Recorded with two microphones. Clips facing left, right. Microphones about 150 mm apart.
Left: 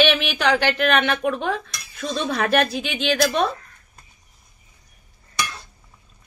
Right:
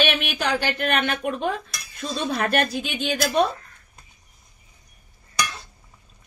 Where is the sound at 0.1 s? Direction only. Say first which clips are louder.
Left 4 dB; 90° left; by 3.5 s 75° left (ahead or behind).